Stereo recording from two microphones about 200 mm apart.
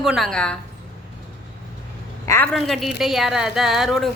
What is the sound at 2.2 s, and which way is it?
Speech, 15° left (ahead or behind).